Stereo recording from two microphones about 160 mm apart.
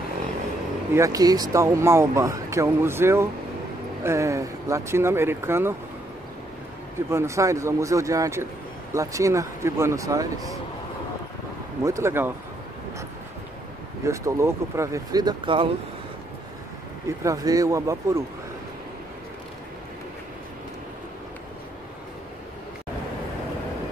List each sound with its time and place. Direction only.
0.9 s speech: 20° right (ahead or behind)
7.1 s speech: 15° right (ahead or behind)
11.8 s speech: 20° right (ahead or behind)
14.0 s speech: 20° right (ahead or behind)
17.2 s speech: 20° right (ahead or behind)